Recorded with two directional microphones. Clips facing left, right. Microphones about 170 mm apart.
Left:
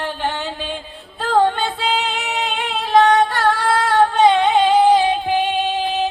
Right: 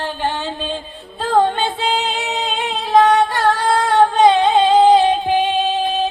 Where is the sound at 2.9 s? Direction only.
15° right (ahead or behind).